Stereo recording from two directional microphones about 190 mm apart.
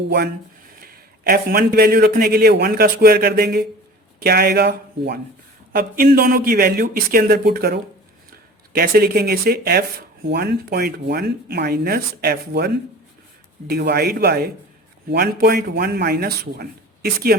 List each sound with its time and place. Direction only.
0.8 s a man's voice: 50° right (ahead or behind)